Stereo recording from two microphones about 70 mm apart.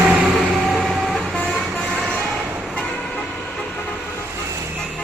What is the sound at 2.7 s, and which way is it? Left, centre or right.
Vehicle, centre.